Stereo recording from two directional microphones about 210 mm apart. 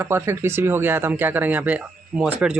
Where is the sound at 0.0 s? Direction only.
10° right (ahead or behind).